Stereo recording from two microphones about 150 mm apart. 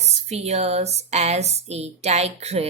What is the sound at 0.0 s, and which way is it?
A woman's voice, 45° right (ahead or behind).